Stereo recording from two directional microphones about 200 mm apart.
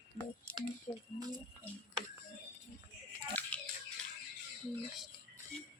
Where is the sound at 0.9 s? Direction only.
15° left (ahead or behind).